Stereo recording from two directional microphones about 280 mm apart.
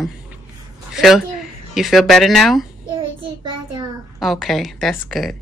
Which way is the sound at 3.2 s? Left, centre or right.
Right.